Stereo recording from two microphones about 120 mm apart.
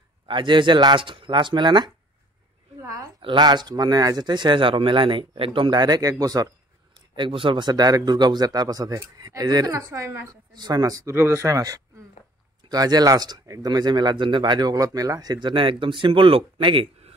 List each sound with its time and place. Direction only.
0.3 s speech: 40° right (ahead or behind)
2.8 s a woman's voice: 30° right (ahead or behind)
3.2 s speech: 40° right (ahead or behind)
7.2 s speech: 45° right (ahead or behind)